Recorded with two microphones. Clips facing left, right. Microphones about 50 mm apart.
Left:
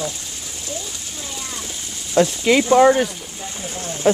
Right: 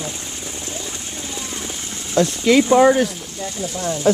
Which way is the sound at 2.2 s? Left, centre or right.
Centre.